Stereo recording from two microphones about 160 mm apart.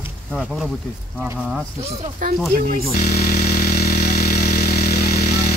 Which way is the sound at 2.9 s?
70° left (ahead or behind).